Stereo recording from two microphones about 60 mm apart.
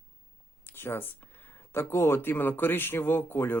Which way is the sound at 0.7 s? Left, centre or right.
Left.